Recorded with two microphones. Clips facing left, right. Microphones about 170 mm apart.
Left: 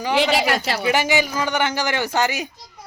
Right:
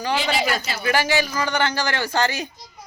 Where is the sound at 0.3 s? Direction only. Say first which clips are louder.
Left 3 dB; 70° left (ahead or behind).